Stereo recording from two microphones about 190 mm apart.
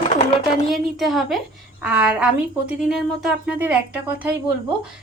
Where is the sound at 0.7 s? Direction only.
Centre (ahead or behind).